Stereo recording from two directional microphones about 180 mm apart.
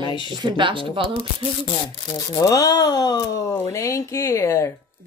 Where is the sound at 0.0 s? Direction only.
25° left (ahead or behind).